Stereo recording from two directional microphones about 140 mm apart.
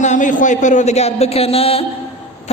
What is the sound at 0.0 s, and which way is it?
A man's voice, 60° left (ahead or behind).